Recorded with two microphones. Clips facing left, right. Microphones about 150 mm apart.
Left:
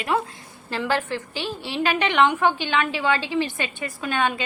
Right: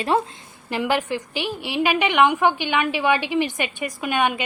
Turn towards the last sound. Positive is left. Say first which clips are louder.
# right 2 dB
turn(degrees=-15)  # may be behind; listen again after turning